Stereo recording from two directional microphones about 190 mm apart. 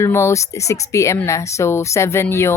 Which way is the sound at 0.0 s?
15° left (ahead or behind).